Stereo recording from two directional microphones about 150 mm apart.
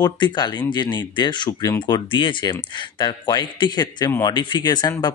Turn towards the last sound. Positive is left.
turn(degrees=30)  # may be behind; listen again after turning